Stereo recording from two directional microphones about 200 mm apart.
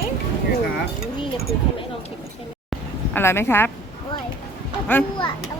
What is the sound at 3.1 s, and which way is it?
Speech, 10° left (ahead or behind).